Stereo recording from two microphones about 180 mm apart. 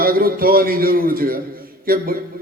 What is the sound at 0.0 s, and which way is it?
A man's voice, 55° right (ahead or behind).